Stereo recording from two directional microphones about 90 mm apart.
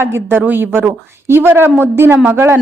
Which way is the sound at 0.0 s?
25° right (ahead or behind).